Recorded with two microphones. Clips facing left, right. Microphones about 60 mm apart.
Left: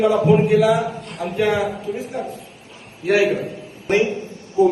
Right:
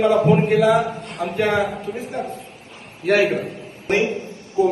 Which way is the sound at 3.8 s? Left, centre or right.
Right.